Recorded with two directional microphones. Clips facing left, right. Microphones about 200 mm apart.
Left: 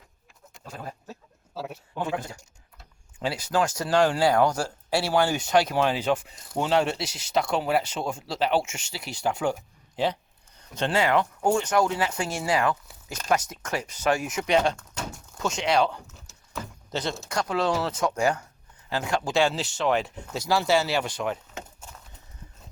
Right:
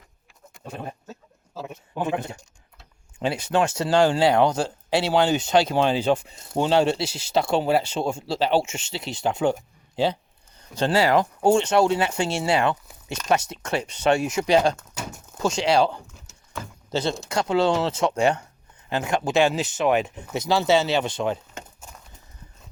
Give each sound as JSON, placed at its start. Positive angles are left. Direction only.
{"t": 0.6, "sound": "speech", "side_deg": -25}
{"t": 1.0, "sound": "a sound", "side_deg": 0}
{"t": 2.0, "sound": "speech", "side_deg": -20}
{"t": 16.1, "sound": "horse", "side_deg": 0}
{"t": 16.9, "sound": "speech", "side_deg": -30}